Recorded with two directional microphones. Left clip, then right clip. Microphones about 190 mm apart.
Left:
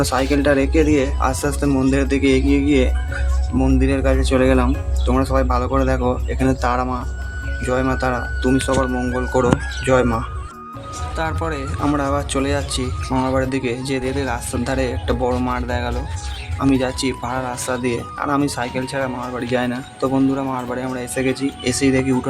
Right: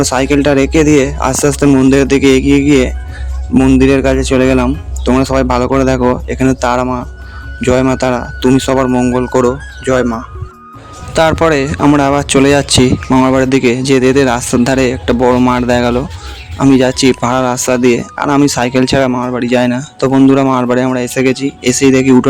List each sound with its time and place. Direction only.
0.0 s speech: 40° right (ahead or behind)
9.3 s speech: 30° right (ahead or behind)
11.1 s speech: 55° right (ahead or behind)